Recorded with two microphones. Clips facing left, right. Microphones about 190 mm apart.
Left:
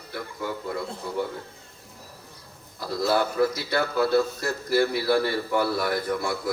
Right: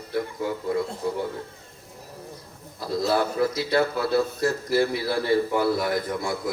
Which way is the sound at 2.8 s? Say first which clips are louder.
Right 1 dB; 25° right (ahead or behind).